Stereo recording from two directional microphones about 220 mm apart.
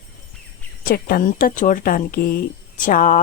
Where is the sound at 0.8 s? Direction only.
45° left (ahead or behind).